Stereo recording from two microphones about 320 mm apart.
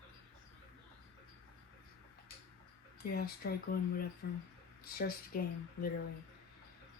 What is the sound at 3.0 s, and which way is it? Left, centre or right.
Speech, left.